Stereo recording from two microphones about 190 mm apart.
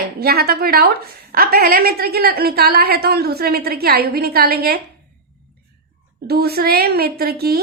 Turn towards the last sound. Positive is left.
turn(degrees=-55)  # may be behind; listen again after turning